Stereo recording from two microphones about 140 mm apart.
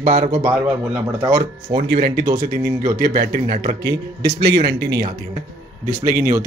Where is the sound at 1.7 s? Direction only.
35° right (ahead or behind).